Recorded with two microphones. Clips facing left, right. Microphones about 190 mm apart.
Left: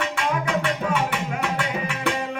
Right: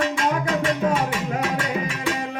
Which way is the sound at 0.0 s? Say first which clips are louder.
Right 3 dB; 40° right (ahead or behind).